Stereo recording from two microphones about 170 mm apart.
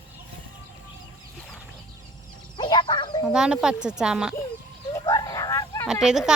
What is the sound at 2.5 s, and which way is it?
Speech, 25° left (ahead or behind).